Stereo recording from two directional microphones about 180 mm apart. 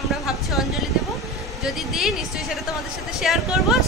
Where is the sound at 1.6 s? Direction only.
Centre (ahead or behind).